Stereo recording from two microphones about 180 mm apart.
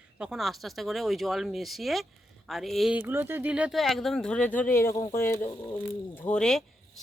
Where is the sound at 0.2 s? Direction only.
Centre (ahead or behind).